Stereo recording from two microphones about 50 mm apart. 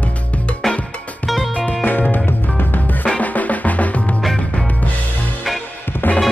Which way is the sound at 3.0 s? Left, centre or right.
Left.